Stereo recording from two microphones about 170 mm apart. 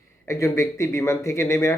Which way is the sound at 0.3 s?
15° left (ahead or behind).